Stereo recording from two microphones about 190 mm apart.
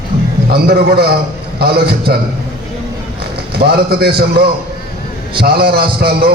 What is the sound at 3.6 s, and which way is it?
A man's voice, 55° right (ahead or behind).